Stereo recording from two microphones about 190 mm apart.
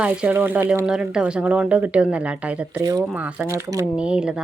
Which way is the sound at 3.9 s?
5° right (ahead or behind).